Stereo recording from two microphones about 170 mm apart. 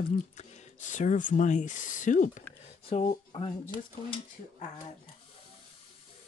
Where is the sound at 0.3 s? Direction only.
40° left (ahead or behind).